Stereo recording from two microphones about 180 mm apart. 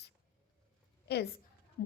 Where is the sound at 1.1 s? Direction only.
65° left (ahead or behind).